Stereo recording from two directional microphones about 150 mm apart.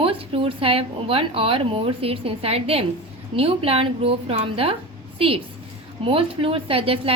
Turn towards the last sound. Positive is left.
turn(degrees=-40)  # may be behind; listen again after turning